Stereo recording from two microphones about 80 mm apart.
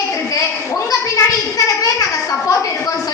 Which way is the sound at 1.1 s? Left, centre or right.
Left.